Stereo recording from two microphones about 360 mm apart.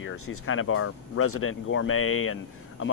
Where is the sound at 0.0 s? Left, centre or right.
Left.